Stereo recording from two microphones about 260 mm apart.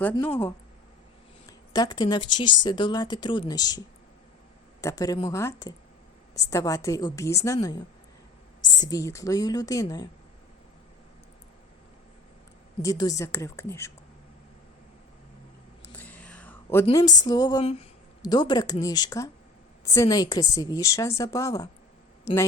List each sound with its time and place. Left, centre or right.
1.5 s a woman's voice: centre
4.8 s a woman's voice: centre
8.8 s a woman's voice: centre
12.8 s a woman's voice: centre
15.8 s a sound: centre
16.8 s a woman's voice: centre